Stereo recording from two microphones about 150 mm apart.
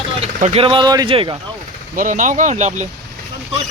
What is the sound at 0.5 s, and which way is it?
Speech, 35° right (ahead or behind).